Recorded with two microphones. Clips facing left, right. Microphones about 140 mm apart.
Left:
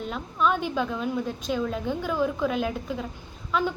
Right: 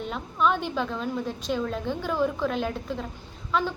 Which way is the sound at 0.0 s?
Centre (ahead or behind).